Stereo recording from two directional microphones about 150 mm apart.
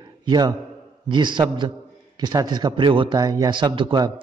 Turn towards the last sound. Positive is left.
turn(degrees=-30)  # may be behind; listen again after turning